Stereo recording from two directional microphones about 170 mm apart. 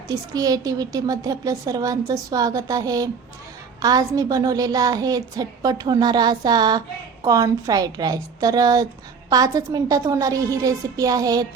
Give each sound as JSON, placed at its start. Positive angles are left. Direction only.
{"t": 0.1, "sound": "a woman's voice", "side_deg": -20}